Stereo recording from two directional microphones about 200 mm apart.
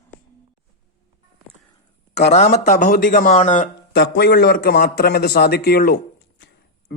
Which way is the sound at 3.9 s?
60° left (ahead or behind).